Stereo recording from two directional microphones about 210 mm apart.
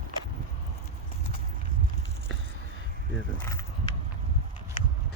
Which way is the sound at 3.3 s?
15° left (ahead or behind).